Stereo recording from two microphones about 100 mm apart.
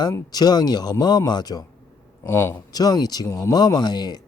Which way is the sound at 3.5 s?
45° left (ahead or behind).